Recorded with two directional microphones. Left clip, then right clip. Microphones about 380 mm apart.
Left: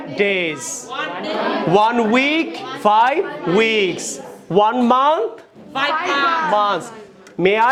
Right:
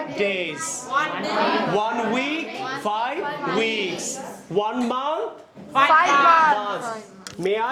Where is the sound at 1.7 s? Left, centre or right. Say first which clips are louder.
Left 8 dB; left.